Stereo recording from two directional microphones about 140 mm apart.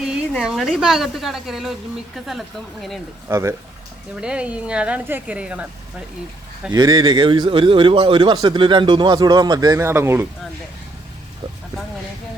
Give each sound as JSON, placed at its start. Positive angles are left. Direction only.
{"t": 0.0, "sound": "a woman's voice", "side_deg": -5}
{"t": 3.2, "sound": "speech", "side_deg": -20}
{"t": 4.1, "sound": "speech", "side_deg": -5}
{"t": 6.7, "sound": "a man's voice", "side_deg": -30}